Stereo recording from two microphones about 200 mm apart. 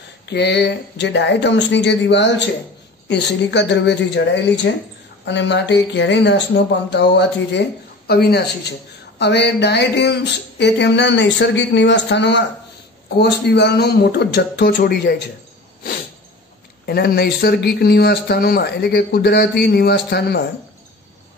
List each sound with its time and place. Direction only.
0.3 s speech: 55° left (ahead or behind)
16.8 s speech: 50° left (ahead or behind)